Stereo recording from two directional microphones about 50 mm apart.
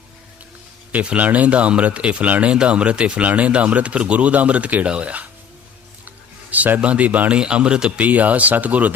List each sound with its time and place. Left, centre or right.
0.9 s speech: right
6.5 s a man's voice: right
7.3 s speech: centre